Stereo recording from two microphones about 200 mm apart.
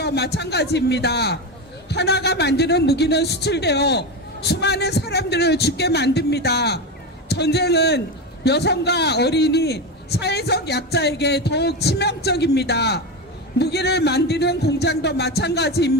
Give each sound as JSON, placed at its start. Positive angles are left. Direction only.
{"t": 0.0, "sound": "speech", "side_deg": 55}